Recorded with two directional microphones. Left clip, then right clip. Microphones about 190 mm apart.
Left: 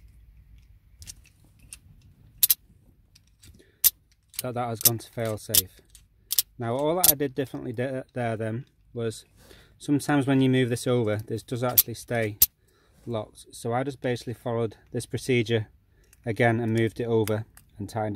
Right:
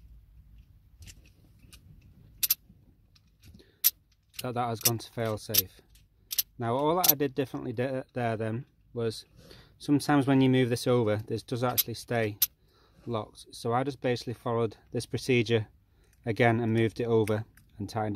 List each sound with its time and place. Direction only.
4.5 s speech: 30° left (ahead or behind)
6.6 s speech: 30° left (ahead or behind)